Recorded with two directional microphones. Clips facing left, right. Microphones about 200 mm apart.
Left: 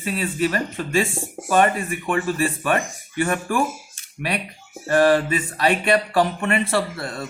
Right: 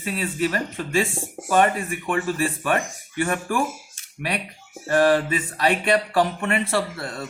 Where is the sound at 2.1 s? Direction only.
20° right (ahead or behind).